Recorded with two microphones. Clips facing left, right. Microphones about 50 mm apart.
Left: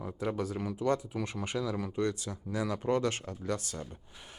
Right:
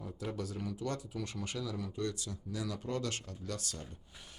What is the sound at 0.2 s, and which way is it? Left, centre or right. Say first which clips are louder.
Speech: left 6 dB; left.